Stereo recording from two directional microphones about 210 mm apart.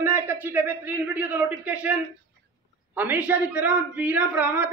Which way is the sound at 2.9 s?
10° right (ahead or behind).